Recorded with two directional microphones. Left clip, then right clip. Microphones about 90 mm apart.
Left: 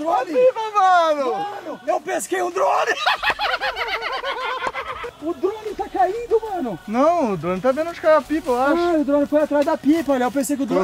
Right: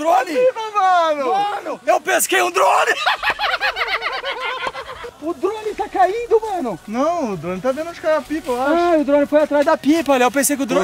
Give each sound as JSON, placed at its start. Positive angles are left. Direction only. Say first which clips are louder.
{"t": 0.0, "sound": "a sound", "louder": "right 2 dB", "side_deg": 15}
{"t": 1.9, "sound": "a sound", "louder": "right 6 dB", "side_deg": 45}
{"t": 2.3, "sound": "speech", "louder": "right 5 dB", "side_deg": 20}
{"t": 2.6, "sound": "speech", "louder": "right 1 dB", "side_deg": 0}
{"t": 6.6, "sound": "speech", "louder": "left 1 dB", "side_deg": 30}
{"t": 8.7, "sound": "speech", "louder": "right 4 dB", "side_deg": 25}